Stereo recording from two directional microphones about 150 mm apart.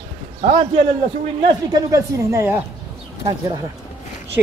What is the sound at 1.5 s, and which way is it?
A man's voice, 25° right (ahead or behind).